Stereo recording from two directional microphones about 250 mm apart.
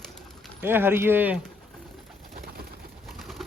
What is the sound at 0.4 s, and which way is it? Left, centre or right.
Speech, centre.